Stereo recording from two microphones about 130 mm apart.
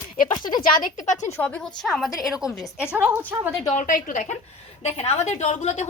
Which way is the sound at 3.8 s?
90° left.